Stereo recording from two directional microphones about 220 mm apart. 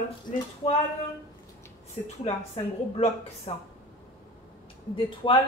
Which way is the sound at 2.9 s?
30° left (ahead or behind).